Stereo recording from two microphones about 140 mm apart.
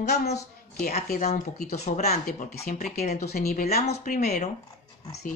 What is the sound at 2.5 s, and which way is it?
Speech, 65° left (ahead or behind).